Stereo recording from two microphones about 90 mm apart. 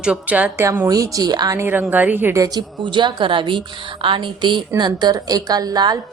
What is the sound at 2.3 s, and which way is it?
A woman's voice, 45° right (ahead or behind).